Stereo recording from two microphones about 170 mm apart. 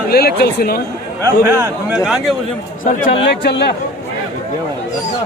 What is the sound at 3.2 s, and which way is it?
Speech, 80° left.